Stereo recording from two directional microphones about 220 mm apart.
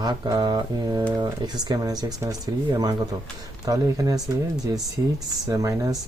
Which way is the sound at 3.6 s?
15° right (ahead or behind).